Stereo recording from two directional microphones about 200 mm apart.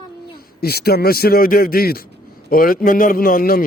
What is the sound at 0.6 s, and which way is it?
A man's voice, 50° left (ahead or behind).